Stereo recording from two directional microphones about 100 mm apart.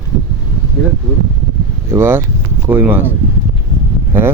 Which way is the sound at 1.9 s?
25° right (ahead or behind).